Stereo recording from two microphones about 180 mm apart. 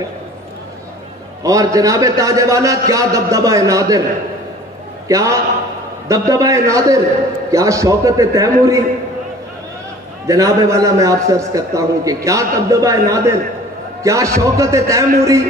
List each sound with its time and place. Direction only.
1.4 s a man's voice: 20° right (ahead or behind)
5.0 s a man's voice: 20° right (ahead or behind)
10.2 s a man's voice: 20° right (ahead or behind)